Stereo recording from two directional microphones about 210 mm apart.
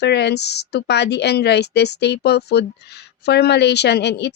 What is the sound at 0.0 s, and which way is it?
Speech, 55° left (ahead or behind).